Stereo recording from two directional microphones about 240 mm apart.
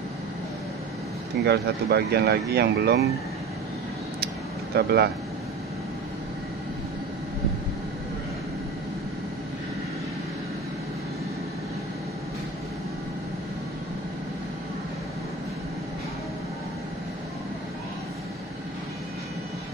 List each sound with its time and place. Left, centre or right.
1.4 s speech: right
4.7 s speech: right